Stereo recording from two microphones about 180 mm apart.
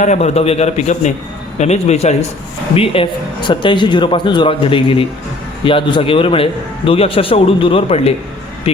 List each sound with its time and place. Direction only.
0.0 s a man's voice: 40° left (ahead or behind)